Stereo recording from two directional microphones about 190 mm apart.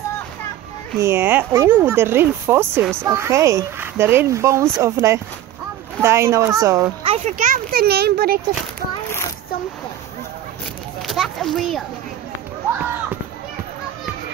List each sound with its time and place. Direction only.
0.9 s speech: 15° right (ahead or behind)
7.3 s a child's voice: 45° right (ahead or behind)
11.1 s speech: centre (ahead or behind)